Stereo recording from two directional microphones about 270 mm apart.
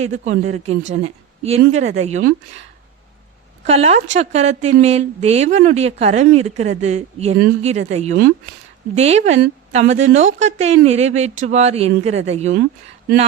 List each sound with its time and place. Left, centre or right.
0.0 s speech: right
3.6 s speech: right